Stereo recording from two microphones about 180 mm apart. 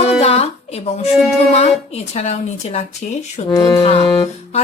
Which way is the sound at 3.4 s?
20° left (ahead or behind).